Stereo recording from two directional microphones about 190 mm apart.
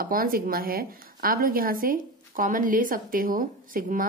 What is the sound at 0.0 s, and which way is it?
A woman's voice, 50° right (ahead or behind).